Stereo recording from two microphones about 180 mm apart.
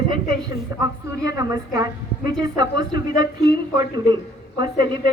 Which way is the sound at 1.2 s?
20° right (ahead or behind).